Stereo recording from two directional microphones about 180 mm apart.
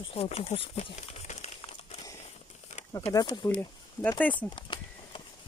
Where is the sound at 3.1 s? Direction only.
20° left (ahead or behind).